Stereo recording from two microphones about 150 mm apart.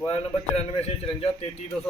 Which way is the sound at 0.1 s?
40° left (ahead or behind).